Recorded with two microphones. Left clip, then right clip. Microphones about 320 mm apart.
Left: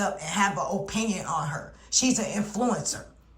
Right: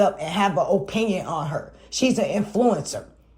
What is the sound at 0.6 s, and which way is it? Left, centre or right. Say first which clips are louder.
Speech: right 8 dB; centre.